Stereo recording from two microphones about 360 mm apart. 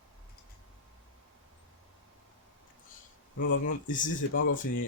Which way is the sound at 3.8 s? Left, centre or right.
Left.